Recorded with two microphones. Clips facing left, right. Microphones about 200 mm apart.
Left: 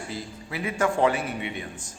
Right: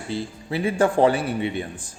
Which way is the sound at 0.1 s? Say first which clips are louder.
Right 7 dB; 30° right (ahead or behind).